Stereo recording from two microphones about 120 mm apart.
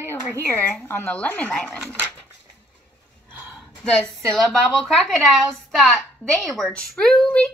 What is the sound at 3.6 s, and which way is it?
A woman's voice, 5° left (ahead or behind).